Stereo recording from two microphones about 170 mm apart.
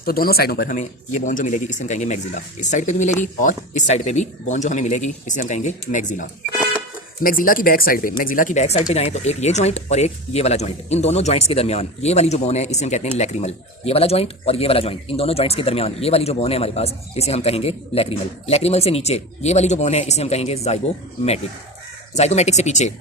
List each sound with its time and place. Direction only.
0.0 s speech: 60° left (ahead or behind)
0.8 s speech: 45° left (ahead or behind)
22.1 s speech: 40° left (ahead or behind)